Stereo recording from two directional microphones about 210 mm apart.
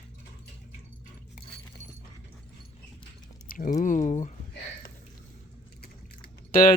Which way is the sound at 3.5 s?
40° left (ahead or behind).